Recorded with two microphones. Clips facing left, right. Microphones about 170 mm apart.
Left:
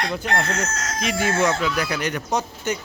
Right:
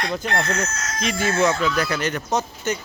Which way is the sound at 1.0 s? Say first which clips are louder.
Right 1 dB; 15° left (ahead or behind).